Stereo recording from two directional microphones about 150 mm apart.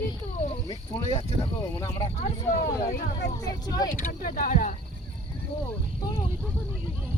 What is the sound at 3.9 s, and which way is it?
Speech, 70° left (ahead or behind).